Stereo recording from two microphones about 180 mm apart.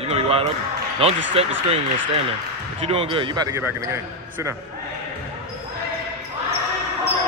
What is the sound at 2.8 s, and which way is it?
Speech, 30° right (ahead or behind).